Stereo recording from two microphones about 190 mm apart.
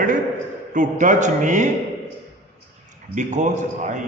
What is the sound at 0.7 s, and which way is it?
Speech, 40° right (ahead or behind).